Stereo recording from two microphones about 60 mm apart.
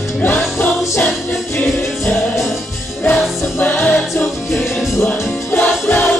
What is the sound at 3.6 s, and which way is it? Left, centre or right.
Music, left.